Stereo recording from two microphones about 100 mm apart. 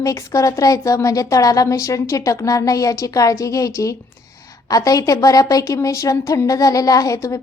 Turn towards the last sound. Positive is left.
turn(degrees=30)  # may be behind; listen again after turning